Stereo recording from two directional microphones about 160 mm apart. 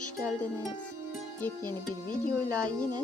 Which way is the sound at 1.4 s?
15° left (ahead or behind).